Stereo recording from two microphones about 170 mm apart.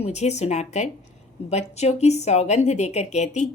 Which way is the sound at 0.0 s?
40° left (ahead or behind).